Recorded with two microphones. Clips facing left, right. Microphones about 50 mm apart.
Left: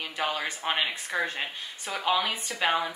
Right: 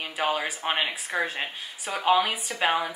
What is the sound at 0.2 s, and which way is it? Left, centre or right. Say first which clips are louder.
A woman's voice: right 3 dB; centre.